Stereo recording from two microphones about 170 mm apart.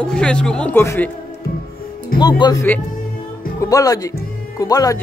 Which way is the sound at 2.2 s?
25° left (ahead or behind).